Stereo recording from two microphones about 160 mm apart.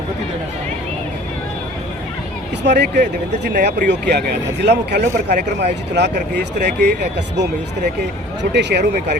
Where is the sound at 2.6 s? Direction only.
90° right.